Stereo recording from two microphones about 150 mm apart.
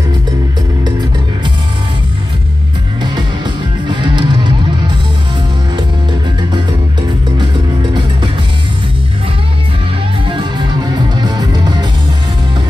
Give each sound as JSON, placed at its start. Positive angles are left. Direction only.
{"t": 3.9, "sound": "music", "side_deg": -30}
{"t": 10.2, "sound": "music", "side_deg": -30}